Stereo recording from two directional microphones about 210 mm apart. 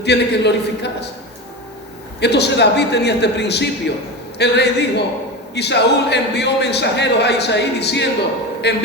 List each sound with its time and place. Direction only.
0.0 s a man's voice: 55° left (ahead or behind)
2.2 s a man's voice: 55° left (ahead or behind)